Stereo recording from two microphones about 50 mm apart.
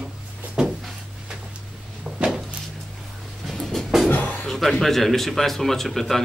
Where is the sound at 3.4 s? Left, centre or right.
Centre.